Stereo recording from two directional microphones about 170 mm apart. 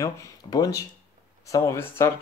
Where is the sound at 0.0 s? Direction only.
20° left (ahead or behind).